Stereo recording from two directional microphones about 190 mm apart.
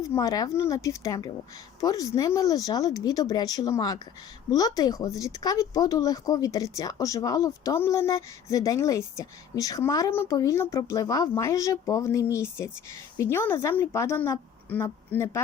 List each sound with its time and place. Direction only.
0.0 s speech: 15° left (ahead or behind)